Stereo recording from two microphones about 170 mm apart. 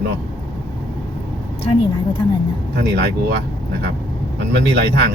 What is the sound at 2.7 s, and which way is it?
Speech, 75° right (ahead or behind).